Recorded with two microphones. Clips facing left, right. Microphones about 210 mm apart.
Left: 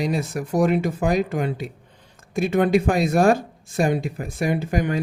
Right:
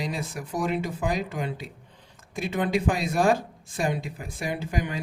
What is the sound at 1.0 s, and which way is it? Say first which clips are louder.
Speech: left 7 dB; 65° left (ahead or behind).